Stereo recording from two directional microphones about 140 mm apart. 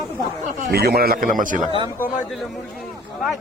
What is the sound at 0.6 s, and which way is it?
A man's voice, 90° right.